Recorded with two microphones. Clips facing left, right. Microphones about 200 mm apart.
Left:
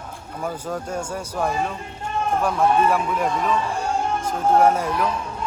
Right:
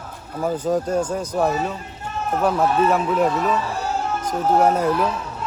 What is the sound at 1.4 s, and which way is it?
Speech, 5° right (ahead or behind).